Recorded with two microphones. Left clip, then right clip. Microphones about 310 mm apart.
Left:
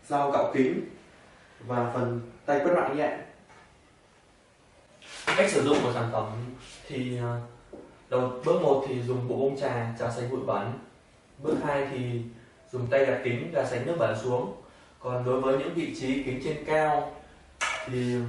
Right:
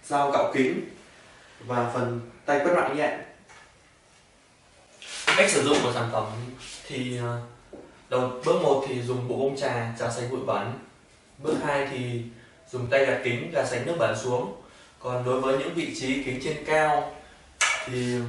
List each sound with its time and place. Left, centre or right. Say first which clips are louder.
0.1 s speech: right 2 dB; centre
5.0 s a man's voice: right 4 dB; centre
9.2 s speech: right 1 dB; left
9.5 s a man's voice: right 2 dB; centre
14.2 s speech: right 1 dB; left
15.0 s a man's voice: right 1 dB; centre
17.6 s a sound: right 2 dB; centre